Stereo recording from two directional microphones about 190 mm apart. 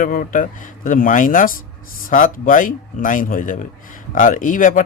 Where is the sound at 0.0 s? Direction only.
45° left (ahead or behind).